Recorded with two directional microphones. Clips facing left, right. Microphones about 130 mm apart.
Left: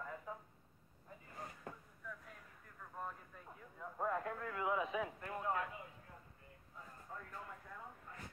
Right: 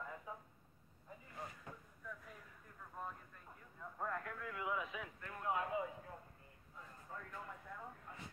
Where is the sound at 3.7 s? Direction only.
15° left (ahead or behind).